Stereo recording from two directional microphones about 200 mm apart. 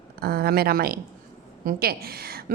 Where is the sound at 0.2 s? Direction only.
50° right (ahead or behind).